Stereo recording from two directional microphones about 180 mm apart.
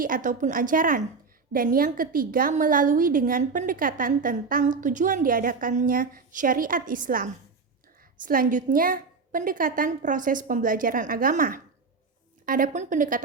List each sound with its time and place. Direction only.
0.0 s a woman's voice: 50° right (ahead or behind)